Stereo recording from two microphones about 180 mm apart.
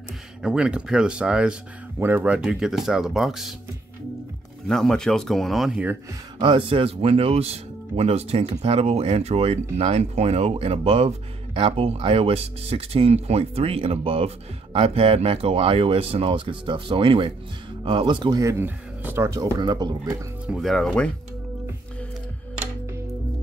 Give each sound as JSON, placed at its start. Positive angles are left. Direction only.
{"t": 0.4, "sound": "speech", "side_deg": -5}
{"t": 4.6, "sound": "speech", "side_deg": 5}
{"t": 6.4, "sound": "speech", "side_deg": -30}
{"t": 20.4, "sound": "speech", "side_deg": 0}